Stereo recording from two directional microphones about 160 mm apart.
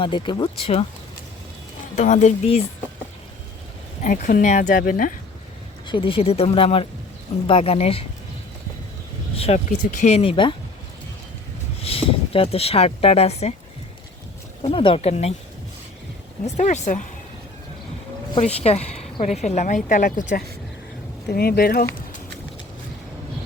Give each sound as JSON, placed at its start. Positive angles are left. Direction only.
{"t": 0.0, "sound": "speech", "side_deg": 30}
{"t": 2.0, "sound": "a woman's voice", "side_deg": 50}
{"t": 4.0, "sound": "speech", "side_deg": 55}
{"t": 5.9, "sound": "speech", "side_deg": 35}
{"t": 9.3, "sound": "speech", "side_deg": 40}
{"t": 11.8, "sound": "speech", "side_deg": 35}
{"t": 14.6, "sound": "speech", "side_deg": 35}
{"t": 16.6, "sound": "a woman's voice", "side_deg": 45}
{"t": 18.3, "sound": "a woman's voice", "side_deg": 40}
{"t": 21.2, "sound": "speech", "side_deg": 75}